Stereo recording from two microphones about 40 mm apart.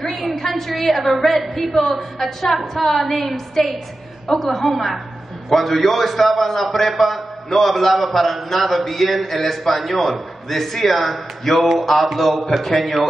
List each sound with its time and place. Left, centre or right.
0.0 s a man's voice: centre